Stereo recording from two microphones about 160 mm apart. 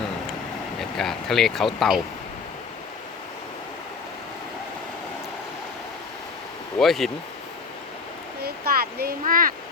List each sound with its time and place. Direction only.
0.8 s speech: centre (ahead or behind)
6.7 s speech: centre (ahead or behind)
8.4 s a sound: 75° right (ahead or behind)